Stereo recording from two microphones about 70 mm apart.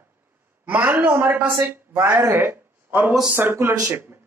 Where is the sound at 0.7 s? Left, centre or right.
Right.